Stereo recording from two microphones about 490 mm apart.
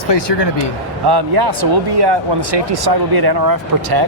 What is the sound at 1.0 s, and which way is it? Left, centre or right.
Speech, right.